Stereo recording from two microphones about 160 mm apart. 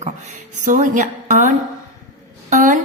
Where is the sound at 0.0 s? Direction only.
50° right (ahead or behind).